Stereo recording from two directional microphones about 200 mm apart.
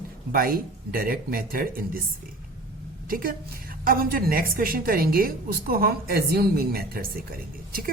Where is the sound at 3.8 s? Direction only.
45° right (ahead or behind).